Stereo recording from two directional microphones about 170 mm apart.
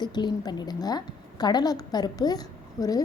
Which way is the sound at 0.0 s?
25° left (ahead or behind).